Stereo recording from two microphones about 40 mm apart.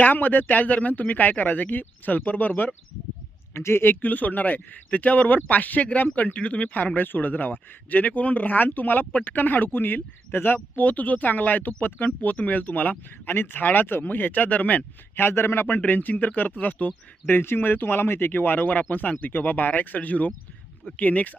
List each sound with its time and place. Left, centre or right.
0.0 s speech: left
2.2 s speech: left
3.5 s speech: left
3.8 s speech: left
6.7 s speech: left
10.8 s speech: left
15.1 s a man's voice: left
15.9 s speech: left
17.2 s speech: left